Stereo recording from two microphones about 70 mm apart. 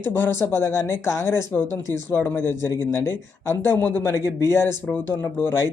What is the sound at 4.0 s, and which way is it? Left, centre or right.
A man's voice, left.